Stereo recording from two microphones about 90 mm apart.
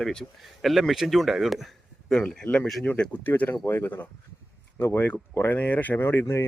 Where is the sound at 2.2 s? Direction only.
15° left (ahead or behind); by 6.4 s 30° left (ahead or behind).